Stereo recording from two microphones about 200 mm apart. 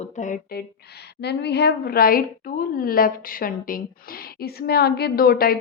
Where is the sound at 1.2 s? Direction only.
55° left (ahead or behind).